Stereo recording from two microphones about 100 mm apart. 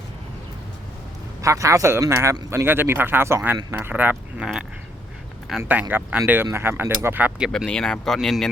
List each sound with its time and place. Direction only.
1.4 s a man's voice: 35° right (ahead or behind)
5.5 s speech: 5° right (ahead or behind)
5.9 s speech: 15° right (ahead or behind)
7.5 s speech: 5° left (ahead or behind)